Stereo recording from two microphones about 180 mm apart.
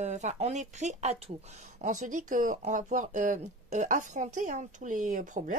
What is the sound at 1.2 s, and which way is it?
Speech, 40° right (ahead or behind).